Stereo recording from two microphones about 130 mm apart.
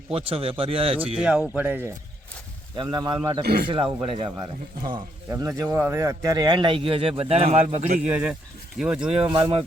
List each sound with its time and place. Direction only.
0.1 s a man's voice: 45° right (ahead or behind)
1.2 s a man's voice: 10° right (ahead or behind)
2.7 s speech: 30° right (ahead or behind)
5.3 s a man's voice: 20° right (ahead or behind); by 8.0 s 65° right (ahead or behind)
8.1 s a man's voice: 10° right (ahead or behind)
9.1 s a man's voice: 45° right (ahead or behind)